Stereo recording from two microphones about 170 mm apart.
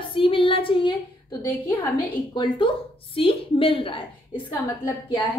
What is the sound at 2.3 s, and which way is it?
A woman's voice, 30° left (ahead or behind).